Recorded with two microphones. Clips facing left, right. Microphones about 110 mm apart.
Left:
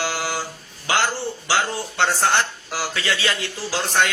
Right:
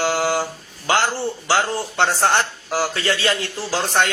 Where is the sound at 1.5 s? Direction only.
40° right (ahead or behind).